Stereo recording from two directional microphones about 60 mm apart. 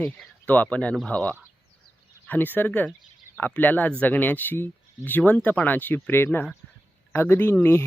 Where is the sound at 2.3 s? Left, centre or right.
Left.